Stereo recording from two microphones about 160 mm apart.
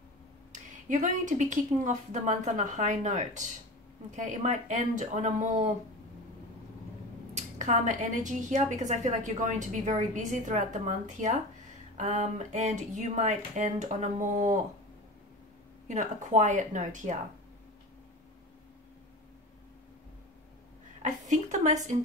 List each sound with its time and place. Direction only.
0.5 s a woman's voice: 50° right (ahead or behind)
7.3 s a woman's voice: 50° right (ahead or behind)
15.9 s a woman's voice: 50° right (ahead or behind)
21.0 s a sound: 50° right (ahead or behind)